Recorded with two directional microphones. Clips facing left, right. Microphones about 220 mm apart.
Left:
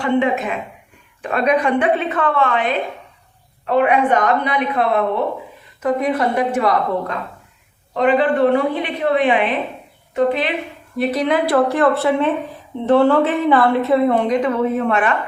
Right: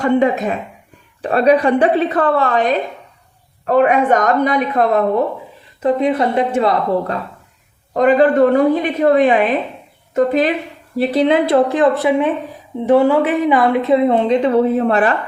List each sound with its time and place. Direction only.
0.0 s a woman's voice: 40° right (ahead or behind)
5.8 s a woman's voice: 25° right (ahead or behind)
7.9 s a woman's voice: 45° right (ahead or behind)
10.9 s a woman's voice: 30° right (ahead or behind)